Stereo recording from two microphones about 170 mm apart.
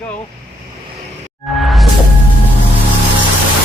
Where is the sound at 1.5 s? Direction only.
Centre (ahead or behind).